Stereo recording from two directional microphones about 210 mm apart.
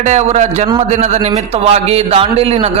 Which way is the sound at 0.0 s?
35° right (ahead or behind).